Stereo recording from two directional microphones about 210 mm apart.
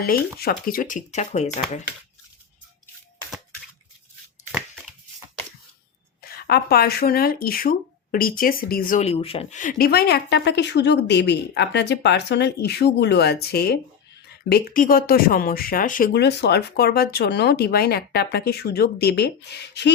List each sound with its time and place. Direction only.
0.3 s speech: 45° left (ahead or behind)
6.2 s speech: 45° left (ahead or behind)